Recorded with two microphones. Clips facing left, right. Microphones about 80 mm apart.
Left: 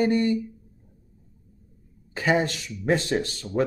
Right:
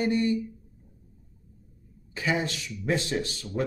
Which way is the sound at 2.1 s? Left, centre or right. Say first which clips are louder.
Left 5 dB; left.